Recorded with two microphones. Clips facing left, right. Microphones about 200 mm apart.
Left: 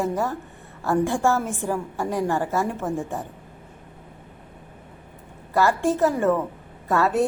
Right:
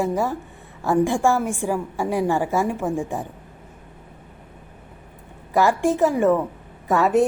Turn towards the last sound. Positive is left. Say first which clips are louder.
# right 3 dB
turn(degrees=-15)  # may be behind; listen again after turning